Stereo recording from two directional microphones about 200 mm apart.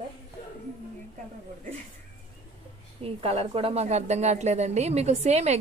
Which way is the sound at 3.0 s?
30° right (ahead or behind).